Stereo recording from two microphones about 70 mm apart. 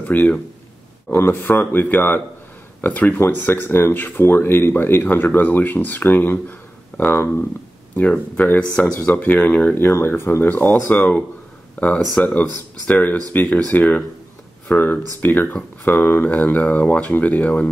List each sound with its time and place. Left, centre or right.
0.0 s speech: left
8.7 s speech: centre
9.1 s speech: left
9.8 s speech: left